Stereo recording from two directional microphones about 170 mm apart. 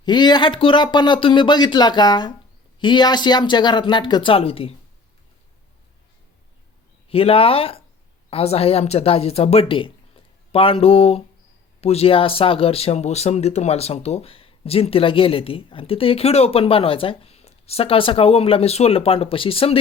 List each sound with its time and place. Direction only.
0.0 s speech: 25° left (ahead or behind)
7.1 s speech: 35° left (ahead or behind)